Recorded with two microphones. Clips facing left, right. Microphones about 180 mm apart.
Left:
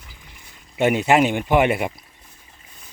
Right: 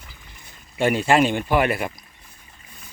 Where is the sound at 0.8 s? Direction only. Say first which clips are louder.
Left 1 dB; 20° left (ahead or behind).